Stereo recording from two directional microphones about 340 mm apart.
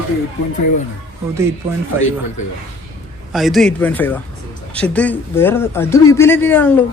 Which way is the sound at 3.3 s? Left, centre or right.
Centre.